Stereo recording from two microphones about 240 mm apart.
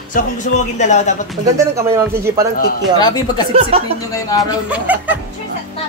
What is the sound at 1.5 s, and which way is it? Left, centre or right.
Speech, centre.